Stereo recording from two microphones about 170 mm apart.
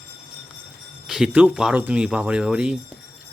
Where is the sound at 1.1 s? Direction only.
5° right (ahead or behind).